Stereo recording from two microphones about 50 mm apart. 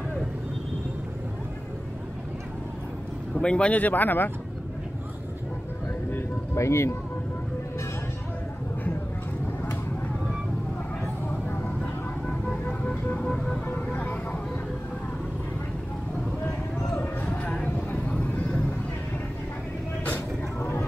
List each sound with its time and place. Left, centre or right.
3.3 s speech: centre
3.7 s speech: left
6.5 s speech: left
12.6 s music: left
13.6 s vehicle: left
17.0 s a sound: left
17.4 s vehicle: centre